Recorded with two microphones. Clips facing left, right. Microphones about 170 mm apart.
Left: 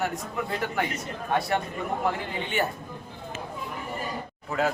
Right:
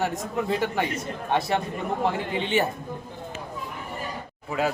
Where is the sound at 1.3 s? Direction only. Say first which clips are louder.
Right 1 dB; 25° right (ahead or behind).